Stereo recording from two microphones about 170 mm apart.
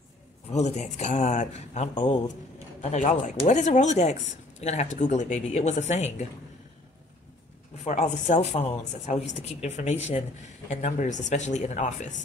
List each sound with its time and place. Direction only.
0.5 s speech: 40° left (ahead or behind)
7.8 s speech: 45° left (ahead or behind)